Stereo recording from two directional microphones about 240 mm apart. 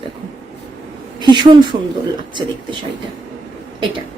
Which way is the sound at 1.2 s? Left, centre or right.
Centre.